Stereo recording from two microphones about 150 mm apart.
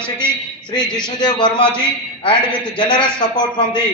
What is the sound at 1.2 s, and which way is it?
Speech, 30° left (ahead or behind).